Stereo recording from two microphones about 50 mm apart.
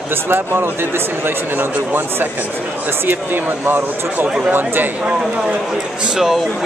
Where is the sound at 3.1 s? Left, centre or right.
Right.